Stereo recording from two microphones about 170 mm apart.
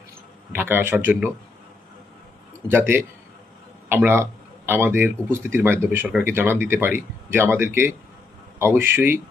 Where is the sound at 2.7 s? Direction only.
15° right (ahead or behind).